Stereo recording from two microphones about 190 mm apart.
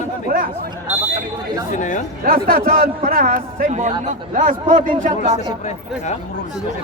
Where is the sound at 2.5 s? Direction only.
50° right (ahead or behind).